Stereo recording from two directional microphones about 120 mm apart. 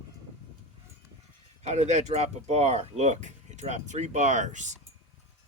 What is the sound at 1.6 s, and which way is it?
Speech, 70° right (ahead or behind).